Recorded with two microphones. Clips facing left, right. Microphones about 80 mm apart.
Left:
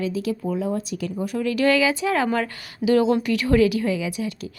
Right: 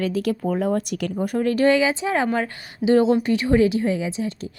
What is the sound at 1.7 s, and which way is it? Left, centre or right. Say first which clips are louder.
Speech: right 1 dB; right.